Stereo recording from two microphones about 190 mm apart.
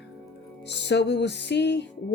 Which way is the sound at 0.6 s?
65° left (ahead or behind).